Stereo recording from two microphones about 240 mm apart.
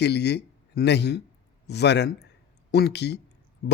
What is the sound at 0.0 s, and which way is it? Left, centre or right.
A man's voice, left.